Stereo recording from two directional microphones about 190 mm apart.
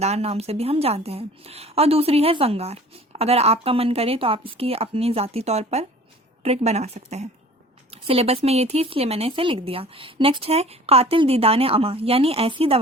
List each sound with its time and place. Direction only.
0.0 s a woman's voice: 35° right (ahead or behind)